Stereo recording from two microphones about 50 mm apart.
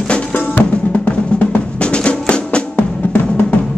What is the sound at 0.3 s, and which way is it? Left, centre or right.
Drum, left.